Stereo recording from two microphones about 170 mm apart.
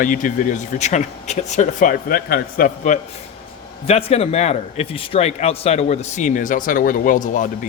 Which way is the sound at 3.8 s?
35° left (ahead or behind).